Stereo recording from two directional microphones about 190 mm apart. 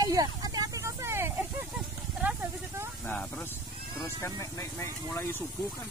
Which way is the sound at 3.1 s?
5° left (ahead or behind).